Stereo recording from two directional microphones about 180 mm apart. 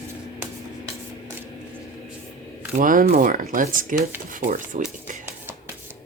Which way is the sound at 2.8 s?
50° right (ahead or behind).